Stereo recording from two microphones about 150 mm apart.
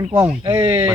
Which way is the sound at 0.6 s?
40° right (ahead or behind).